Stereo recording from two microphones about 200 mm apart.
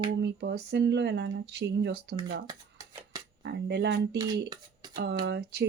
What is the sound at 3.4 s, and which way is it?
Speech, 60° right (ahead or behind).